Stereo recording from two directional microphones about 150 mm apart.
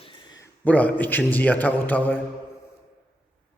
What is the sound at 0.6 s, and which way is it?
A man's voice, 10° left (ahead or behind).